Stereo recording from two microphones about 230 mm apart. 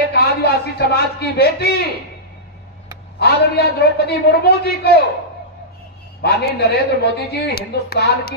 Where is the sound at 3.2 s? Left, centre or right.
Left.